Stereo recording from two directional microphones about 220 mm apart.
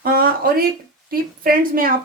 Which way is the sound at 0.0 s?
40° right (ahead or behind).